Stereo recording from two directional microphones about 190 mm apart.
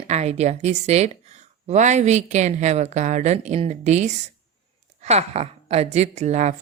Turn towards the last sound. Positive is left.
turn(degrees=-35)  # may be behind; listen again after turning